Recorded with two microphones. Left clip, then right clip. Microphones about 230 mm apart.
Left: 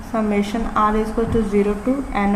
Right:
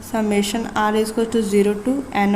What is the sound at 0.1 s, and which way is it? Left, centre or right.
A woman's voice, right.